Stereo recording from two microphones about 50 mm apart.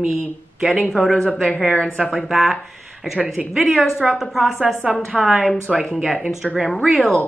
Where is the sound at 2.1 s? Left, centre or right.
Centre.